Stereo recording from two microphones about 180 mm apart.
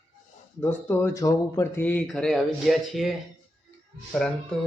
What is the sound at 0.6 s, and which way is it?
Speech, 10° left (ahead or behind).